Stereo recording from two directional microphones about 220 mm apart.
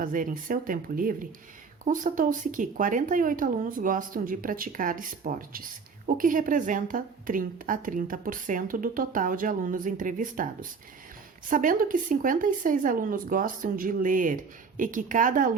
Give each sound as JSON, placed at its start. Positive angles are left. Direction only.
{"t": 0.0, "sound": "a woman's voice", "side_deg": -40}